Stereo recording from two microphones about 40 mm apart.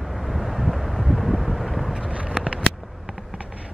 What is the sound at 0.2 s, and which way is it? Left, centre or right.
Vehicle, centre.